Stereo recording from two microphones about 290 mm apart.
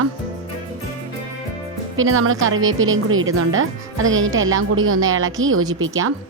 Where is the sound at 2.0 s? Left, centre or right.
Right.